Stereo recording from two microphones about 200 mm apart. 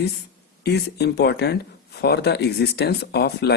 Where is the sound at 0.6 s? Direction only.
55° left (ahead or behind).